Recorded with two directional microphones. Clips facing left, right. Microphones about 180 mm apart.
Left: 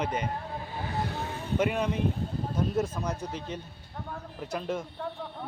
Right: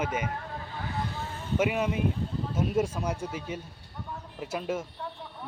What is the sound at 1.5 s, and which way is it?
Speech, 5° right (ahead or behind).